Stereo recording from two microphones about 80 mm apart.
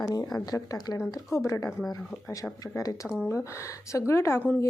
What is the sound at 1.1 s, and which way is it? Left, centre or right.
A woman's voice, left.